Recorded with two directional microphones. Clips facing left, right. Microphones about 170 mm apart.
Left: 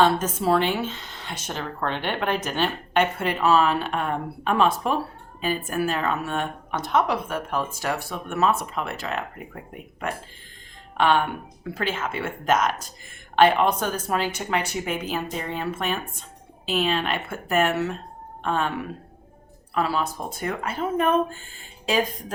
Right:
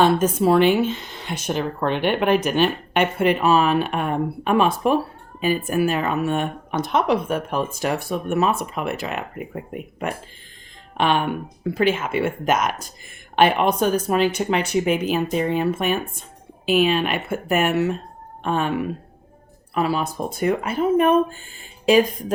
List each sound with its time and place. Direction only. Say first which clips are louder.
0.0 s speech: right 4 dB; 15° right (ahead or behind)
19.7 s speech: right 3 dB; 15° right (ahead or behind)